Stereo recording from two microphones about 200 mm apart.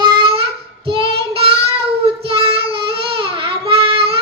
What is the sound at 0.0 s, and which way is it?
Child singing, 25° right (ahead or behind).